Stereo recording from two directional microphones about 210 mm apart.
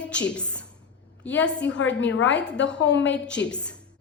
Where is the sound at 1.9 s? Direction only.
60° left (ahead or behind).